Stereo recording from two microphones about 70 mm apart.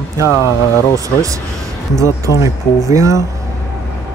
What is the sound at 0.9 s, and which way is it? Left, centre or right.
Speech, right.